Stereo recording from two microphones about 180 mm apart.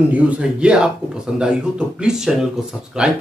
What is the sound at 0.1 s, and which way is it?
Speech, 5° right (ahead or behind).